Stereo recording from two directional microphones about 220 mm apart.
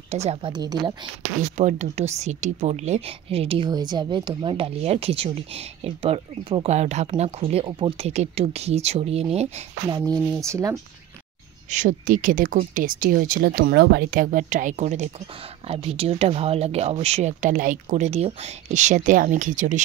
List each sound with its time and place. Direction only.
0.1 s speech: 30° right (ahead or behind)
1.6 s speech: 30° right (ahead or behind); by 10.8 s 15° right (ahead or behind)
11.7 s speech: 35° right (ahead or behind)